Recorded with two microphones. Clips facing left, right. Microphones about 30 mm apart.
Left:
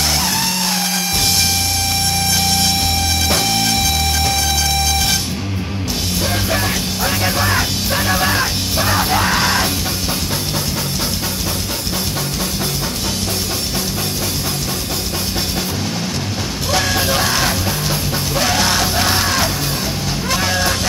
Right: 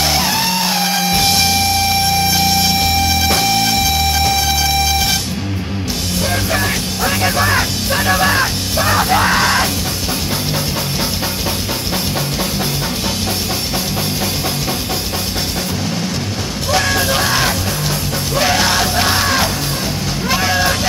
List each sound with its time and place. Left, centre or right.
1.1 s music: centre
6.5 s music: centre
16.7 s music: centre